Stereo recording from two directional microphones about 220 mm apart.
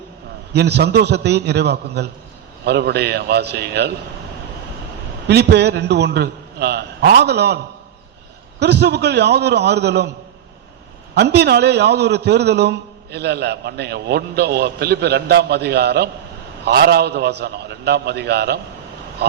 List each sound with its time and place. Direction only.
0.5 s a man's voice: 50° right (ahead or behind)
5.3 s a man's voice: 50° right (ahead or behind)
11.1 s a man's voice: 50° right (ahead or behind)